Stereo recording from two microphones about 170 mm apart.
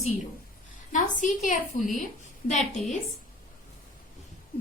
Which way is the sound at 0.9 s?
50° left (ahead or behind).